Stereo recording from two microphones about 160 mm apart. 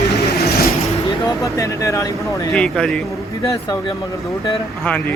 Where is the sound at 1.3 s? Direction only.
20° left (ahead or behind).